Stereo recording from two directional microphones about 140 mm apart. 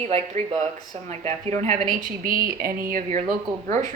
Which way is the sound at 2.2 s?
85° right.